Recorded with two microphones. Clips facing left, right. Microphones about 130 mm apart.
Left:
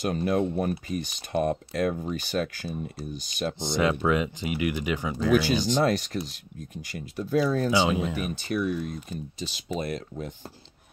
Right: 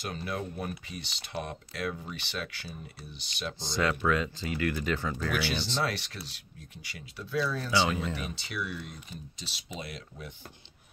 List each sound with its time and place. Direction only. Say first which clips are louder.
0.0 s speech: left 10 dB; 45° left (ahead or behind)
3.6 s speech: left 4 dB; 20° left (ahead or behind)
5.7 s speech: left 9 dB; 45° left (ahead or behind)
7.7 s speech: left 4 dB; 15° left (ahead or behind)
8.4 s speech: left 10 dB; 50° left (ahead or behind)